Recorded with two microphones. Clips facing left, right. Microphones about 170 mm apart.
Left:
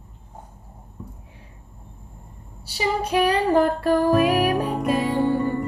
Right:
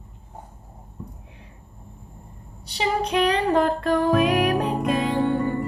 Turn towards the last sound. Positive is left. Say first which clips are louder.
# left 1 dB
turn(degrees=0)  # may be behind; listen again after turning